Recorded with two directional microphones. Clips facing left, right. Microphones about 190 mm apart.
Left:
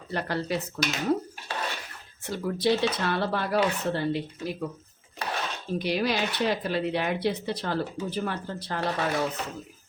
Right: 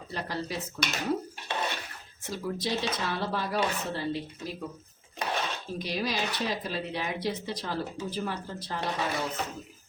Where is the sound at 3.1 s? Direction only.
60° left (ahead or behind).